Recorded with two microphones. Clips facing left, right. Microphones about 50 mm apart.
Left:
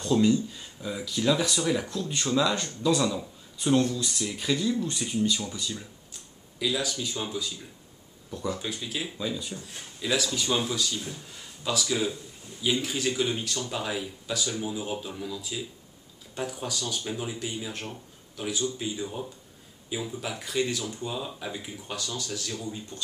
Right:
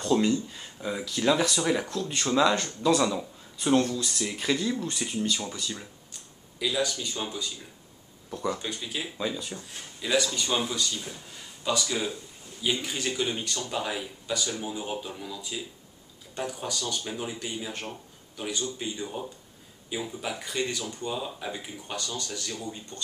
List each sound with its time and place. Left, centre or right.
0.0 s speech: centre
6.6 s speech: centre
8.5 s speech: centre